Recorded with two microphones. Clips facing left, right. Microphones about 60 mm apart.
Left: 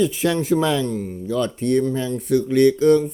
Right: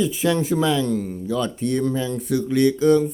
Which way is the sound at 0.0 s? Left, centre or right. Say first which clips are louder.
Left 1 dB; left.